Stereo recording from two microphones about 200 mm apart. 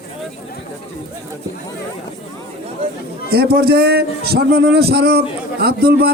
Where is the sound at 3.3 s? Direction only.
50° right (ahead or behind).